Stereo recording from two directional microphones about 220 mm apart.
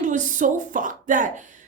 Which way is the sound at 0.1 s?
35° right (ahead or behind).